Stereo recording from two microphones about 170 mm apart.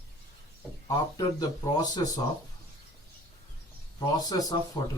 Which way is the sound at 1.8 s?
25° left (ahead or behind).